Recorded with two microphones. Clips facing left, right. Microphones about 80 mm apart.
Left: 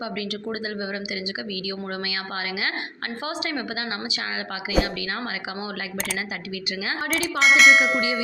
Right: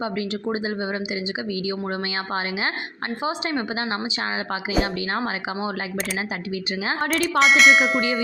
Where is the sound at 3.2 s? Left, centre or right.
Right.